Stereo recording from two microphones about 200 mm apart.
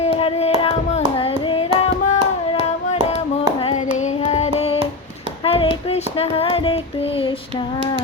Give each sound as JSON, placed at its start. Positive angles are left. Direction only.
{"t": 0.0, "sound": "music", "side_deg": 30}
{"t": 0.6, "sound": "hands", "side_deg": 30}
{"t": 4.2, "sound": "hands", "side_deg": 30}
{"t": 5.5, "sound": "child singing", "side_deg": 30}